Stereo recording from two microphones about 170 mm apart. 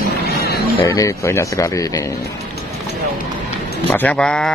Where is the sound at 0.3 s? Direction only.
65° left (ahead or behind).